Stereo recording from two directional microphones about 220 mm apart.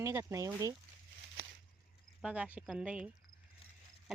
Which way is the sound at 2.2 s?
5° right (ahead or behind).